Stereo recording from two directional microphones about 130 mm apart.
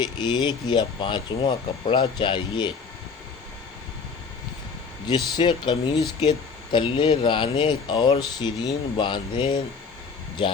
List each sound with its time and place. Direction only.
0.0 s speech: 35° left (ahead or behind)
5.0 s speech: 35° left (ahead or behind)